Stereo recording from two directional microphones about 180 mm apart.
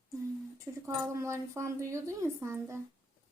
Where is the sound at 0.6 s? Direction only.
15° right (ahead or behind).